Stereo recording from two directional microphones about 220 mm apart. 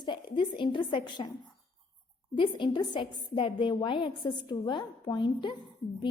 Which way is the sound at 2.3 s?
20° left (ahead or behind).